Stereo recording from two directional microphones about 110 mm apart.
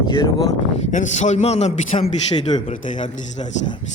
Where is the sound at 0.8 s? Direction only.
90° left; by 2.1 s 75° left (ahead or behind).